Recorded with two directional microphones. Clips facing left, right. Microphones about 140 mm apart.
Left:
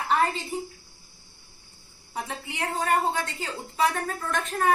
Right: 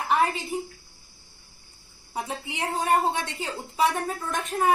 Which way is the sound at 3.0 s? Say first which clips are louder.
Right 1 dB; 25° right (ahead or behind).